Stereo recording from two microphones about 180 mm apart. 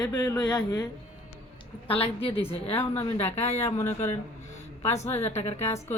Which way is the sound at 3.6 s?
15° left (ahead or behind).